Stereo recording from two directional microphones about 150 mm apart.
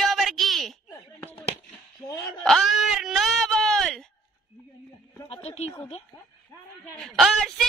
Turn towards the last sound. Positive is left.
turn(degrees=0)  # may be behind; listen again after turning